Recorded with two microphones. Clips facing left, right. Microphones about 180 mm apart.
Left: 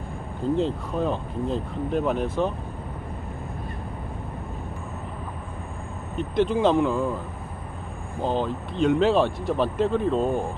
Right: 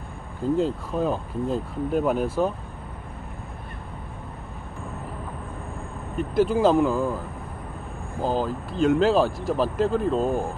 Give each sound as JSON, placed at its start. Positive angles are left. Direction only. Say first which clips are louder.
{"t": 0.6, "sound": "speech", "louder": "right 1 dB", "side_deg": -5}
{"t": 6.1, "sound": "speech", "louder": "right 1 dB", "side_deg": -5}
{"t": 8.2, "sound": "speech", "louder": "even", "side_deg": -5}